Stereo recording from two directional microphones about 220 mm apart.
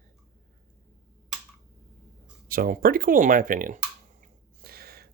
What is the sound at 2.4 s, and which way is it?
Speech, 40° right (ahead or behind).